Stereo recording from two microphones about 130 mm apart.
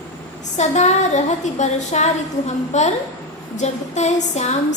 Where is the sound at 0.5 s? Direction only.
60° left (ahead or behind).